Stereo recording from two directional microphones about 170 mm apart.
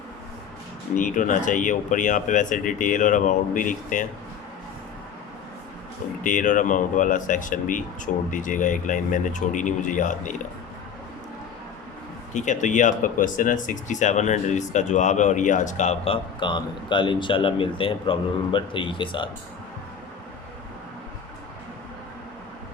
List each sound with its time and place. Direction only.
0.9 s speech: 50° left (ahead or behind)
6.2 s speech: 50° left (ahead or behind)
12.3 s speech: 45° left (ahead or behind)
16.4 s speech: 25° left (ahead or behind)